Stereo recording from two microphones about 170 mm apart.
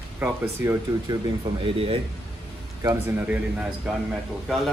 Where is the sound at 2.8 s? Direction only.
15° right (ahead or behind).